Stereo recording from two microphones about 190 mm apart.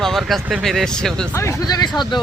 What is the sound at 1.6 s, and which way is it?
Speech, 20° left (ahead or behind).